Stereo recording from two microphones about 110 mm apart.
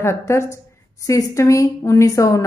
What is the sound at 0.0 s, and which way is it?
A woman's voice, 25° left (ahead or behind).